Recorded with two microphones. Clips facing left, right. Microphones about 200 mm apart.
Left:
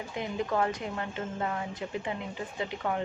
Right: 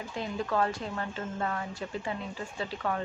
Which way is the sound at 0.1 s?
20° left (ahead or behind).